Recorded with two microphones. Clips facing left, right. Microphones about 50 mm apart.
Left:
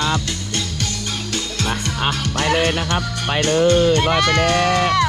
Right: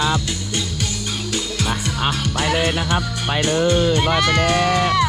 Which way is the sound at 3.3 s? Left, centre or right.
Left.